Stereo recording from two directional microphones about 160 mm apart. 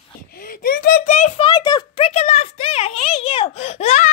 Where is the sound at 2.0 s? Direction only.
40° left (ahead or behind).